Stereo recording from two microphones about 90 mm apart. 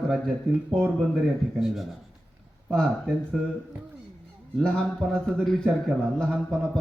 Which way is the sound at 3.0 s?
5° right (ahead or behind).